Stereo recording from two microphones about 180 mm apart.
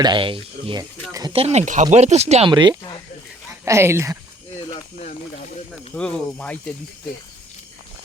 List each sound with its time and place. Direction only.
0.0 s speech: 25° right (ahead or behind)
3.7 s speech: 15° right (ahead or behind)
4.7 s a sound: 35° left (ahead or behind)
5.9 s speech: 5° left (ahead or behind)